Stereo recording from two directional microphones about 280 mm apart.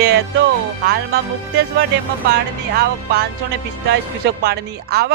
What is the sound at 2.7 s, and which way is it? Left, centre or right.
Speech, right.